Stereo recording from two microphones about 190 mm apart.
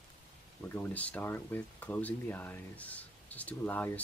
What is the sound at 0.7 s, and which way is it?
Speech, 10° left (ahead or behind).